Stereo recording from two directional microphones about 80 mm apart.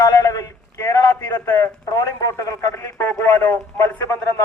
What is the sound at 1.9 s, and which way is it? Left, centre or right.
A man's voice, left.